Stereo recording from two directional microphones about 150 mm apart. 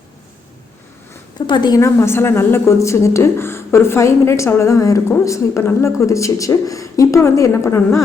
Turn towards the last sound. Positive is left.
turn(degrees=20)  # may be behind; listen again after turning